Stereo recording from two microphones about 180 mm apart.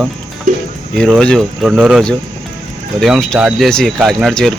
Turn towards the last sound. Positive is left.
turn(degrees=0)  # may be behind; listen again after turning